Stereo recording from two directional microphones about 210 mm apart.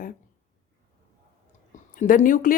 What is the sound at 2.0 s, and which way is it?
Speech, 40° left (ahead or behind).